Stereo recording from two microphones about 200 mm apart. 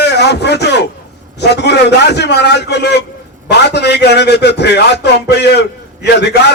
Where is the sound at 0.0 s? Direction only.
55° left (ahead or behind).